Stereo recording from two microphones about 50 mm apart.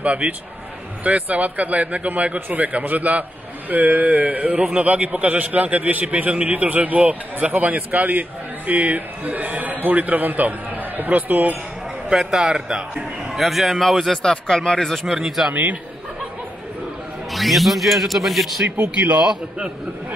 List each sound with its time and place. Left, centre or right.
0.0 s a man's voice: right
12.1 s a man's voice: centre
13.3 s speech: centre
15.0 s a man's voice: centre
15.5 s a man's voice: right
17.3 s speech: centre
18.8 s a man's voice: right